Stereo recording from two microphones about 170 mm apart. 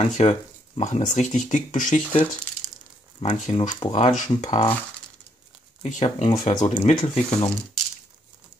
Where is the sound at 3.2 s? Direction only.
45° left (ahead or behind).